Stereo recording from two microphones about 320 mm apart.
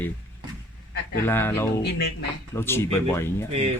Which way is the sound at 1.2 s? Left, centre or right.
Centre.